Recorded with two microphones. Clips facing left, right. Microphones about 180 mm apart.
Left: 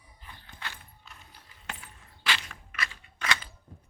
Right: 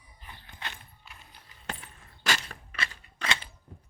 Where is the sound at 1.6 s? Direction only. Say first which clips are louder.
Right 3 dB; 35° right (ahead or behind).